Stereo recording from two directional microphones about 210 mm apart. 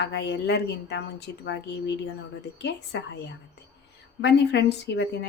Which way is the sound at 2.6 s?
55° left (ahead or behind).